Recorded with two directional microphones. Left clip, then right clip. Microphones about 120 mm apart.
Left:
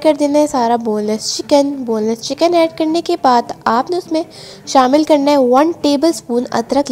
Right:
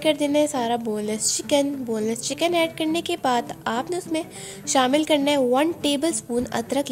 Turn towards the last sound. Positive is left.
turn(degrees=40)  # may be behind; listen again after turning